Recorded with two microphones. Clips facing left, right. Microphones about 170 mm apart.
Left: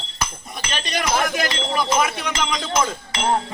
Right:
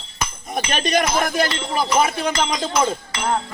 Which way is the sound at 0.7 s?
50° right (ahead or behind).